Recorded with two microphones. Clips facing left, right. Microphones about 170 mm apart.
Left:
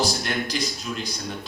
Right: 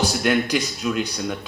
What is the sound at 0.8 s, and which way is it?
Speech, 60° right (ahead or behind).